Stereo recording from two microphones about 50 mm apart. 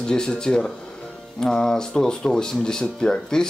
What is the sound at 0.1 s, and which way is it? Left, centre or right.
Speech, centre.